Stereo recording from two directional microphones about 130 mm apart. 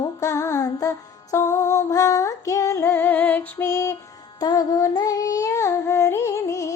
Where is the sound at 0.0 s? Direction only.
25° left (ahead or behind).